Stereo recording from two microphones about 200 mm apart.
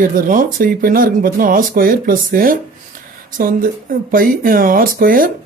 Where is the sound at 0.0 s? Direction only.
40° right (ahead or behind).